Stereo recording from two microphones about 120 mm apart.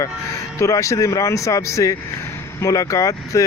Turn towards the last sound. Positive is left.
turn(degrees=25)  # may be behind; listen again after turning